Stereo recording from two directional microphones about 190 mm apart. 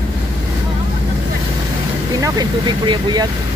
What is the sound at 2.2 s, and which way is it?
Speech, 20° right (ahead or behind).